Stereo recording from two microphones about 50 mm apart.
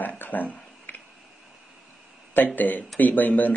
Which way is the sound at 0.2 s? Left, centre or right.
Left.